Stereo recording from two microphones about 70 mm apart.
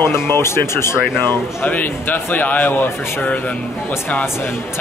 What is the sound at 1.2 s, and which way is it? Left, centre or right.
A man's voice, left.